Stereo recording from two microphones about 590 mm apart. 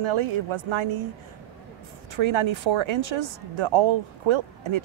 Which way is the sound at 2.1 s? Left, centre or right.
Right.